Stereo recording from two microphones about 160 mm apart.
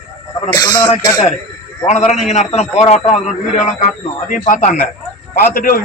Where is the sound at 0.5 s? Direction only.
25° left (ahead or behind).